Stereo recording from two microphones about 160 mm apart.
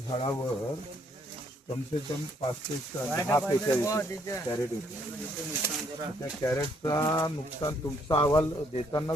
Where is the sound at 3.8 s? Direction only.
20° left (ahead or behind).